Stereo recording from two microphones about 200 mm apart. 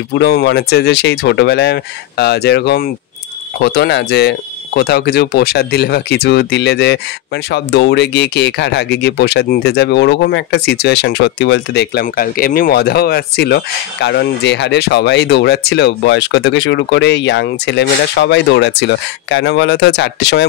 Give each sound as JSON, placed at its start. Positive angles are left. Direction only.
{"t": 0.1, "sound": "speech", "side_deg": 55}